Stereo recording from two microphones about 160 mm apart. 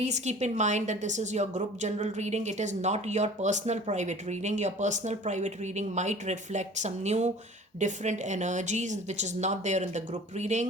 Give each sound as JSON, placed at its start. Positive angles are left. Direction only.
{"t": 0.0, "sound": "a woman's voice", "side_deg": -45}